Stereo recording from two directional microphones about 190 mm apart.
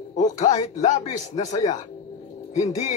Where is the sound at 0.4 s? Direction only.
40° left (ahead or behind).